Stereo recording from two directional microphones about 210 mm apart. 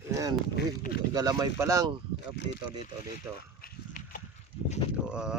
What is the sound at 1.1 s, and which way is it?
Speech, 15° right (ahead or behind).